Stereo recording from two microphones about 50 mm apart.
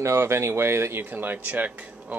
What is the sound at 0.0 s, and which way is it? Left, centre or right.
Speech, right.